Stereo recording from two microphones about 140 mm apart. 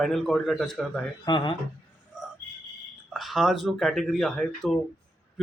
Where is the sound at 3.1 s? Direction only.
Centre (ahead or behind).